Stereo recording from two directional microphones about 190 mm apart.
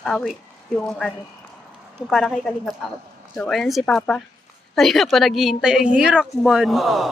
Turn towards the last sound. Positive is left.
turn(degrees=0)  # may be behind; listen again after turning